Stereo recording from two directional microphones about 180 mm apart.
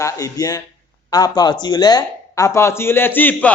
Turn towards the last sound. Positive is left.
turn(degrees=10)  # may be behind; listen again after turning